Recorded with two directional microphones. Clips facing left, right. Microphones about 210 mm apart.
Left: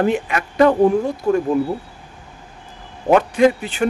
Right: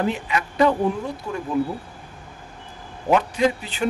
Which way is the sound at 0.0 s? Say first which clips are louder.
Left 5 dB; 55° left (ahead or behind).